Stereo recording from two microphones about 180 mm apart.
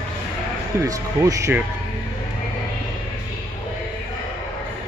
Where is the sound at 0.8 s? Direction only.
15° right (ahead or behind).